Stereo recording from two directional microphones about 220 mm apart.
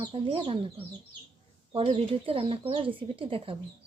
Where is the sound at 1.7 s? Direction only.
25° right (ahead or behind).